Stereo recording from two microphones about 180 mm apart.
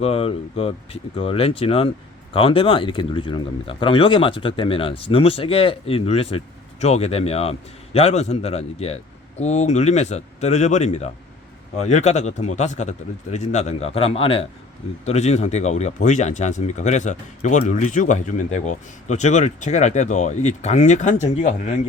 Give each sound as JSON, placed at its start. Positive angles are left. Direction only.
{"t": 0.0, "sound": "speech", "side_deg": 35}